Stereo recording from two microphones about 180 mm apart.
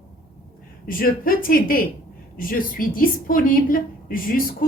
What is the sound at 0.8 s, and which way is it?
A woman's voice, 50° left (ahead or behind).